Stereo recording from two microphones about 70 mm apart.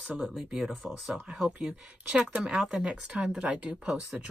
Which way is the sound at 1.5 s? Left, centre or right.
Centre.